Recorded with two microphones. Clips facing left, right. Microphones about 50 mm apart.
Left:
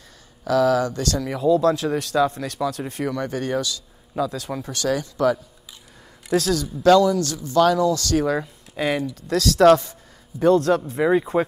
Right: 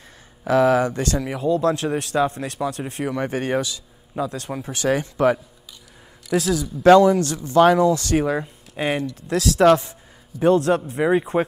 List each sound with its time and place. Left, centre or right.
0.4 s speech: right
2.0 s speech: right
2.8 s speech: centre
3.1 s speech: right
4.8 s speech: right
6.3 s speech: centre
6.8 s speech: right; by 9.9 s centre
10.4 s speech: right